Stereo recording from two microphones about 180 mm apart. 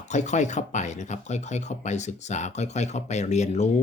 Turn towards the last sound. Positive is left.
turn(degrees=40)  # may be behind; listen again after turning